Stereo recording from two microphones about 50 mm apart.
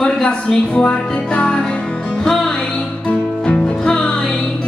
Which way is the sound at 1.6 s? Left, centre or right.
Centre.